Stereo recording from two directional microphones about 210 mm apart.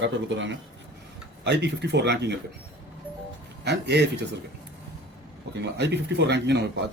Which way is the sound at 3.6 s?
55° right (ahead or behind).